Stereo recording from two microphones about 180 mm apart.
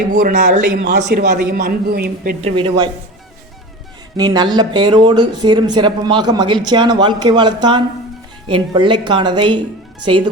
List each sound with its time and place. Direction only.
0.1 s a man's voice: 45° right (ahead or behind)
0.8 s a man's voice: 70° right (ahead or behind)
2.4 s speech: 25° right (ahead or behind)
4.2 s speech: 20° right (ahead or behind)